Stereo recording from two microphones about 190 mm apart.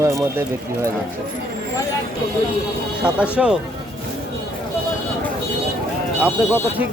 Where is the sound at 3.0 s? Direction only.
5° right (ahead or behind).